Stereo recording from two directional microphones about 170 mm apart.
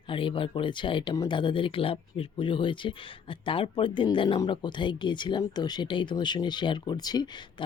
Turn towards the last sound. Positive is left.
turn(degrees=25)  # may be behind; listen again after turning